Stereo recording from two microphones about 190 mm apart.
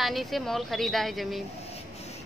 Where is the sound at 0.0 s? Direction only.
Centre (ahead or behind).